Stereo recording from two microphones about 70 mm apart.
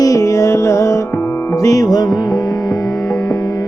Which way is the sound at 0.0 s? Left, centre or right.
Left.